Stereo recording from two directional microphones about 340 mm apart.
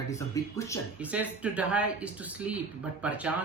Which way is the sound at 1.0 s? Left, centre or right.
Centre.